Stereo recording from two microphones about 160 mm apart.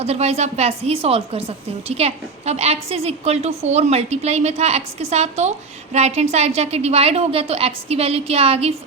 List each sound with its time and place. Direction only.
0.0 s a woman's voice: 40° right (ahead or behind)